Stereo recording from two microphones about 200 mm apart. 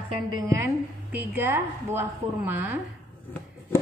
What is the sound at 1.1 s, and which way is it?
A woman's voice, 10° right (ahead or behind).